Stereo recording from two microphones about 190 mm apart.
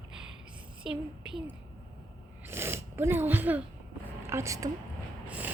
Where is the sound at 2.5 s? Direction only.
10° right (ahead or behind).